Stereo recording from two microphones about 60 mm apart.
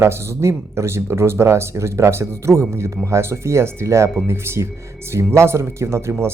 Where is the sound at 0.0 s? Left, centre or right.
Right.